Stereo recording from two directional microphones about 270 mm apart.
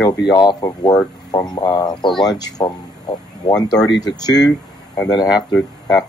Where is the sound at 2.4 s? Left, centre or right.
Centre.